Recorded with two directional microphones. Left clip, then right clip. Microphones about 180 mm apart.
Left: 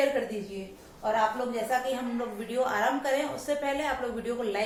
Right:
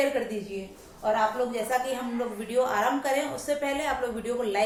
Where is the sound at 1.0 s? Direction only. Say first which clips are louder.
Right 2 dB; 20° right (ahead or behind).